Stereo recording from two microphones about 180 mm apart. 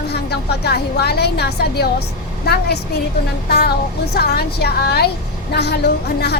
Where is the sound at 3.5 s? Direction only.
65° left (ahead or behind).